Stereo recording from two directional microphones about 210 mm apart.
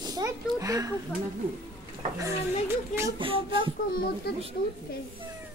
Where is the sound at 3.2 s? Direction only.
25° right (ahead or behind).